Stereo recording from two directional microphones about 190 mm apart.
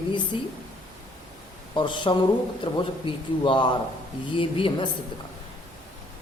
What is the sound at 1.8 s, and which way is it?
A woman's voice, 25° left (ahead or behind).